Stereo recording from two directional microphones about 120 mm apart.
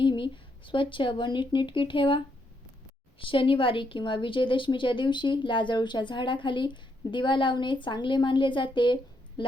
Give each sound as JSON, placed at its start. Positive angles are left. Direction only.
{"t": 0.0, "sound": "a woman's voice", "side_deg": 45}